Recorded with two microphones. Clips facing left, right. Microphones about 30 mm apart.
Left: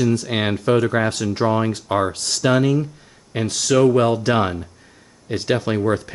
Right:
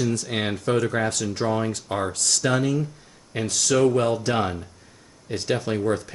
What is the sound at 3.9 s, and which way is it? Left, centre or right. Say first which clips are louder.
Speech: left 5 dB; left.